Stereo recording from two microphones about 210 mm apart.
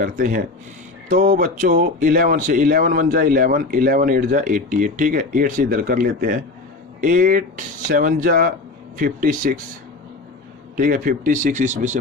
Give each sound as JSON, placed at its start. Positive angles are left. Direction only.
{"t": 0.0, "sound": "speech", "side_deg": -40}
{"t": 10.8, "sound": "speech", "side_deg": -40}